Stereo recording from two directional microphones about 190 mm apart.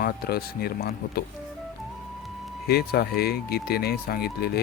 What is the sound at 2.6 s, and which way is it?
Speech, 55° left (ahead or behind).